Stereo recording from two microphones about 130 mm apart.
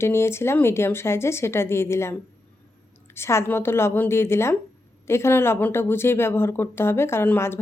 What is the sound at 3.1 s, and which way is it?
A woman's voice, 20° left (ahead or behind).